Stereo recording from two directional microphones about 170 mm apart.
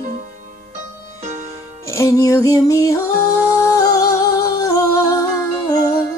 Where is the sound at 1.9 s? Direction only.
20° left (ahead or behind).